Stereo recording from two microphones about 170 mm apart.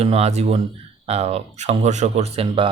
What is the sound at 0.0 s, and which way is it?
Speech, 35° right (ahead or behind).